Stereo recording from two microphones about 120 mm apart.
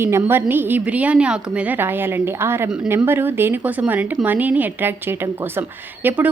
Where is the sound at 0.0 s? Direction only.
20° right (ahead or behind).